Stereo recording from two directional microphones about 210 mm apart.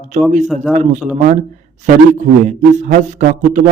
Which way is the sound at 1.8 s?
35° right (ahead or behind).